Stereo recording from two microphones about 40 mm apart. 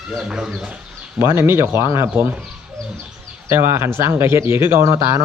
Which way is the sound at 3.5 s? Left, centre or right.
Right.